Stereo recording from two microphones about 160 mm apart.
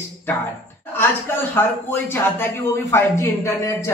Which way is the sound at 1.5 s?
15° left (ahead or behind).